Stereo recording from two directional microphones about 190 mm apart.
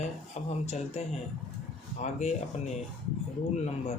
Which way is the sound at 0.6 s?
35° left (ahead or behind).